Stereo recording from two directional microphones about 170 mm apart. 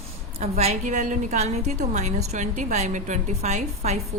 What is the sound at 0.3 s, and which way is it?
A woman's voice, 40° right (ahead or behind).